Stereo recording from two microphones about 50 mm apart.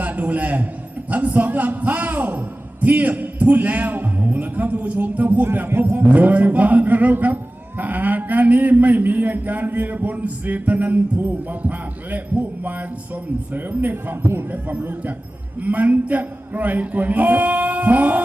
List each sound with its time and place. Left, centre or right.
0.0 s a man's voice: right
5.5 s speech: right
5.8 s a man's voice: right
14.5 s a man's voice: right